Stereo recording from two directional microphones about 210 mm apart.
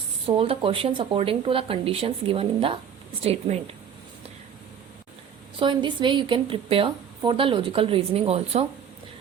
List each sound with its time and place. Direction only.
0.3 s a woman's voice: 25° right (ahead or behind)
5.5 s a woman's voice: 25° right (ahead or behind)